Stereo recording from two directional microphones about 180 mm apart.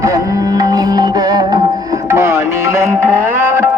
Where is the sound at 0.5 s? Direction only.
20° right (ahead or behind).